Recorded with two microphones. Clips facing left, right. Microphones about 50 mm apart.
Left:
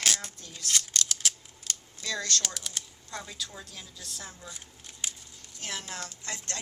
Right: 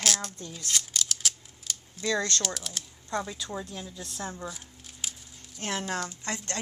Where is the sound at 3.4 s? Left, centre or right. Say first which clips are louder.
Right 5 dB; right.